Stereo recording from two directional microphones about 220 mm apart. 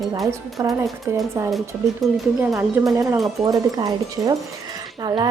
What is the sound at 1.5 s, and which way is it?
A woman's voice, centre (ahead or behind).